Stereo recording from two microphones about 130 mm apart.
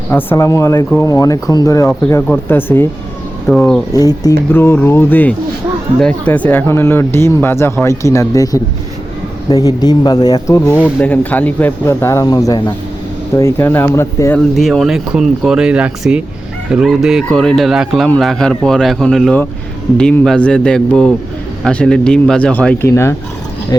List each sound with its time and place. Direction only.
0.1 s speech: 15° left (ahead or behind)
3.5 s speech: 5° left (ahead or behind)
3.9 s speech: 30° left (ahead or behind)
4.5 s speech: 15° left (ahead or behind)
9.6 s speech: 30° left (ahead or behind)
10.8 s speech: 10° left (ahead or behind); by 12.7 s 30° left (ahead or behind)
13.3 s speech: 20° left (ahead or behind)
14.3 s speech: centre (ahead or behind)